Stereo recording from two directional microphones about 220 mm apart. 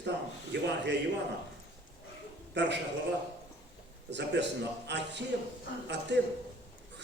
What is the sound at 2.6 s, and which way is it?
Speech, 50° right (ahead or behind).